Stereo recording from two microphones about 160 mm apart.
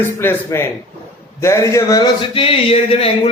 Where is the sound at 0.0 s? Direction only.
15° left (ahead or behind).